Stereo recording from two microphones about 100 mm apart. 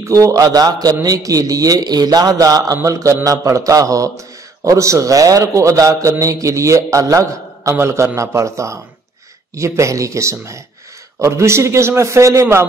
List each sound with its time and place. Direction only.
0.0 s a man's voice: 35° right (ahead or behind)